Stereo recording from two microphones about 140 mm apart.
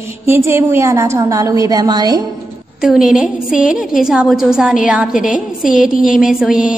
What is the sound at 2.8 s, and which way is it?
A woman's voice, 5° right (ahead or behind).